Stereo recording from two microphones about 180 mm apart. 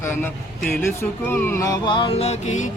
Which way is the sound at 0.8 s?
15° left (ahead or behind).